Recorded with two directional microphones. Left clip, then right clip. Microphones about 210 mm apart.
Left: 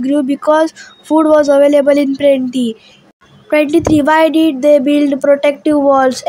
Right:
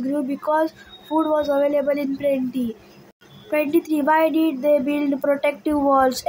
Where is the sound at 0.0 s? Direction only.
35° left (ahead or behind).